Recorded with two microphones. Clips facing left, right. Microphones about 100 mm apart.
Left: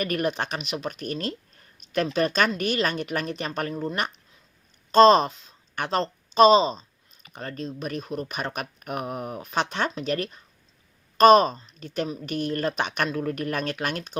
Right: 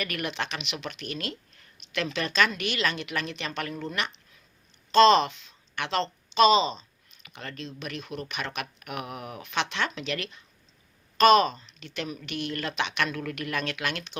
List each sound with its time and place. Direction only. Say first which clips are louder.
0.0 s speech: left 6 dB; 40° left (ahead or behind)
13.1 s speech: left 5 dB; 35° left (ahead or behind)